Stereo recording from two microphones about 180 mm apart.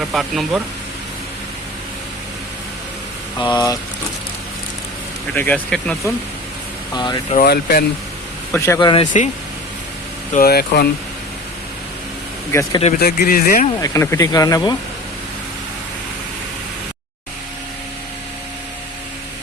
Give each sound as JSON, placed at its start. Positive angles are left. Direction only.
{"t": 0.0, "sound": "speech", "side_deg": 0}
{"t": 3.3, "sound": "speech", "side_deg": 25}
{"t": 5.3, "sound": "speech", "side_deg": 10}
{"t": 6.9, "sound": "speech", "side_deg": 25}
{"t": 7.3, "sound": "speech", "side_deg": 60}
{"t": 8.5, "sound": "speech", "side_deg": 15}
{"t": 10.3, "sound": "speech", "side_deg": 60}
{"t": 12.5, "sound": "speech", "side_deg": 15}
{"t": 13.0, "sound": "speech", "side_deg": 60}
{"t": 13.8, "sound": "speech", "side_deg": 15}